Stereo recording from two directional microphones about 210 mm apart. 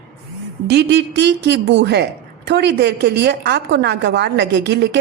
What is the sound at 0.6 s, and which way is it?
Speech, 55° right (ahead or behind).